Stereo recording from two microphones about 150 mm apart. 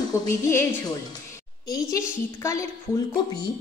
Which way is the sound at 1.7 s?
20° left (ahead or behind).